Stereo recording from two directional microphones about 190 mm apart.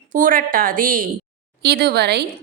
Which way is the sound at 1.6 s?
60° right (ahead or behind).